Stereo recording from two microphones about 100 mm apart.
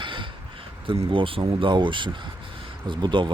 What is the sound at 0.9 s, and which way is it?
Speech, 60° right (ahead or behind).